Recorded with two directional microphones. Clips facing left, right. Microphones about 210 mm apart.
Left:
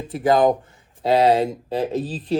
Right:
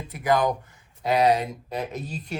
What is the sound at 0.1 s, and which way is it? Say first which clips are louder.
Speech: left 6 dB; 30° left (ahead or behind).